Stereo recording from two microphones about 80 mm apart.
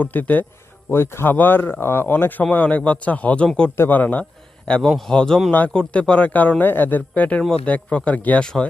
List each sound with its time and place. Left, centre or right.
0.0 s speech: left
3.8 s speech: left
4.7 s speech: centre
5.5 s speech: centre